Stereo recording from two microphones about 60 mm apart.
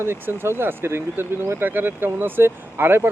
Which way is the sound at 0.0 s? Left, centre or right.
Right.